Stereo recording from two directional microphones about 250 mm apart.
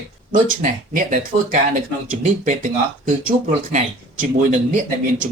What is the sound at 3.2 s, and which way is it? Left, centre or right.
Speech, right.